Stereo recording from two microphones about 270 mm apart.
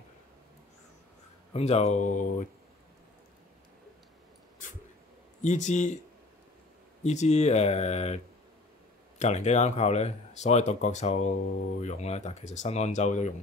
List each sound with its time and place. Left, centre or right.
1.5 s speech: left
5.4 s speech: left
7.0 s speech: left
9.2 s speech: left